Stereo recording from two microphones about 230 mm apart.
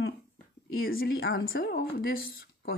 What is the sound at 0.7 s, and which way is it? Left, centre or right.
Speech, left.